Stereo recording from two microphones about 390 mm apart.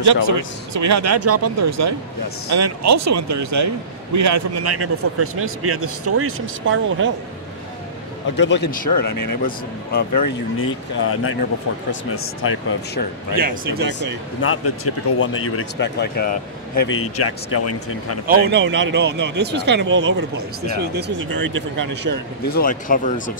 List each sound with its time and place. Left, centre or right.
0.0 s a man's voice: right
8.4 s speech: left
9.0 s speech: left
10.6 s speech: left
13.4 s speech: right
14.4 s speech: left
18.2 s speech: right
22.5 s speech: left